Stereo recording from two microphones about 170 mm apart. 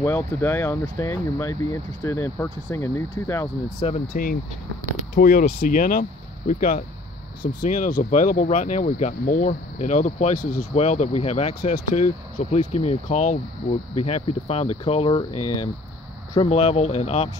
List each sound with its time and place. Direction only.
0.0 s speech: 15° left (ahead or behind)
3.8 s speech: 40° left (ahead or behind)
5.1 s speech: 55° left (ahead or behind); by 15.2 s 35° left (ahead or behind)
16.3 s speech: 35° left (ahead or behind)